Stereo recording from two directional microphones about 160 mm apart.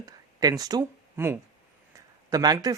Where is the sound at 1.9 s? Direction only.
25° right (ahead or behind).